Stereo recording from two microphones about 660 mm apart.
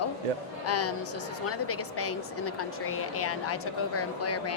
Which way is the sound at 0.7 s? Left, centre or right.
Left.